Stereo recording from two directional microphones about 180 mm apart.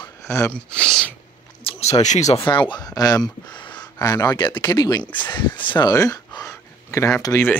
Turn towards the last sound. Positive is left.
turn(degrees=15)  # may be behind; listen again after turning